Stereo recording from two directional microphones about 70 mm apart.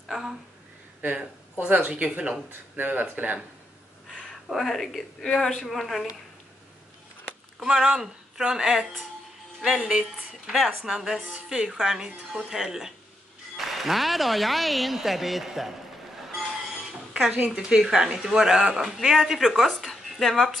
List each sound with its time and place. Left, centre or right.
0.1 s a sound: centre
1.6 s speech: right
4.1 s speech: centre
7.6 s a woman's voice: centre
17.5 s speech: centre